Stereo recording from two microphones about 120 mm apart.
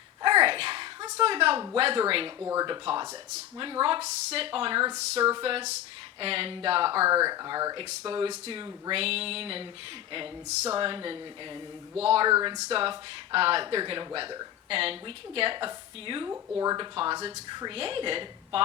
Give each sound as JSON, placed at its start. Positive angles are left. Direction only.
{"t": 0.2, "sound": "a sound", "side_deg": -45}
{"t": 1.7, "sound": "speech", "side_deg": -50}
{"t": 2.4, "sound": "speech", "side_deg": -25}
{"t": 2.6, "sound": "speech", "side_deg": -40}
{"t": 4.0, "sound": "speech", "side_deg": -55}
{"t": 6.9, "sound": "speech", "side_deg": -20}
{"t": 10.8, "sound": "speech", "side_deg": -45}
{"t": 12.3, "sound": "speech", "side_deg": -35}
{"t": 12.5, "sound": "speech", "side_deg": -55}
{"t": 14.7, "sound": "speech", "side_deg": -55}
{"t": 16.2, "sound": "speech", "side_deg": -30}